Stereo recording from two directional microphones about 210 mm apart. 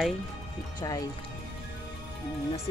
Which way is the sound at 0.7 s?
15° left (ahead or behind).